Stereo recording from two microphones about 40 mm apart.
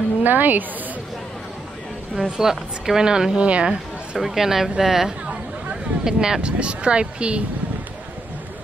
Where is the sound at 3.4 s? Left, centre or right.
Right.